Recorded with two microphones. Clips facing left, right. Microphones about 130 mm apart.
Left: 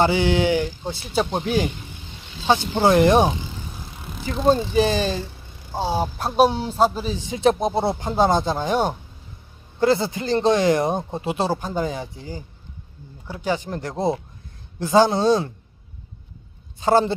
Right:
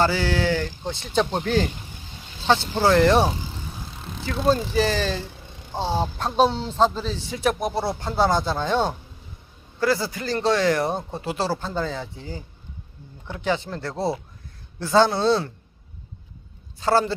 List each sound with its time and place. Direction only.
0.0 s a man's voice: 20° left (ahead or behind)
4.4 s a man's voice: 20° left (ahead or behind)
13.4 s a man's voice: 15° left (ahead or behind)
16.8 s speech: 20° left (ahead or behind)